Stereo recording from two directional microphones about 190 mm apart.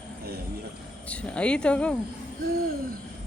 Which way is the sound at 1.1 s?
5° left (ahead or behind).